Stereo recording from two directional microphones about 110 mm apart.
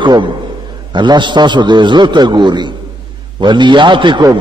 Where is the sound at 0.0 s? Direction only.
45° right (ahead or behind).